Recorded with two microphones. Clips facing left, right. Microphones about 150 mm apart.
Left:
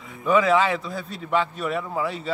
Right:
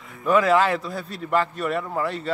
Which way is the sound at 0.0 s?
Centre (ahead or behind).